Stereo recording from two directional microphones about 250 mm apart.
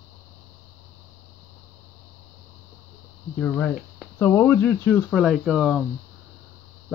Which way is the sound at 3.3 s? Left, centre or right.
Centre.